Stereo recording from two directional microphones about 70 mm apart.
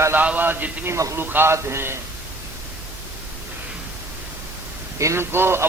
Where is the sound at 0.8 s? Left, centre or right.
Right.